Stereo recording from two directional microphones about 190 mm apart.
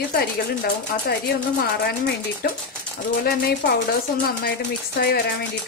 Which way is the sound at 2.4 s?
50° left (ahead or behind).